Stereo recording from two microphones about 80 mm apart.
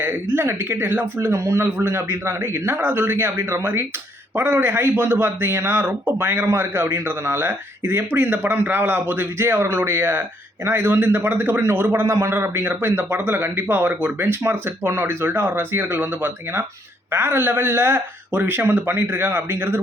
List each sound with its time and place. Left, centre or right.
0.0 s speech: right
1.3 s a man's voice: right